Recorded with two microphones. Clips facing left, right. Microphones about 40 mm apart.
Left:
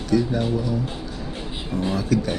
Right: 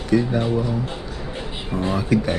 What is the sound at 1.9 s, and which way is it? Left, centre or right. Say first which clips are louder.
Speech: right 3 dB; right.